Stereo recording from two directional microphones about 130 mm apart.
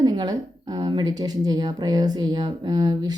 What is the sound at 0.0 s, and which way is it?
Speech, 35° right (ahead or behind).